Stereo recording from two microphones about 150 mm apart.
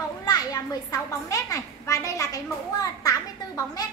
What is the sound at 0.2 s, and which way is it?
A child's voice, 25° left (ahead or behind).